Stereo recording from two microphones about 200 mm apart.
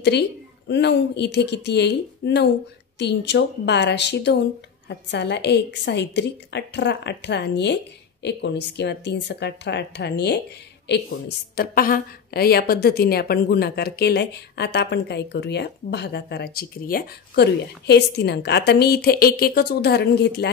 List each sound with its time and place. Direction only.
0.1 s a woman's voice: 55° left (ahead or behind)